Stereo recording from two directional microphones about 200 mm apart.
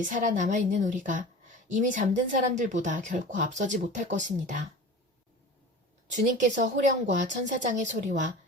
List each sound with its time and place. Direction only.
0.0 s speech: 40° right (ahead or behind)
6.1 s speech: 40° right (ahead or behind)